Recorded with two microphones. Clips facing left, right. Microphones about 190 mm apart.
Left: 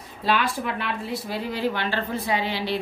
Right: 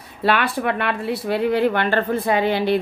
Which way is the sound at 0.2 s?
65° right (ahead or behind).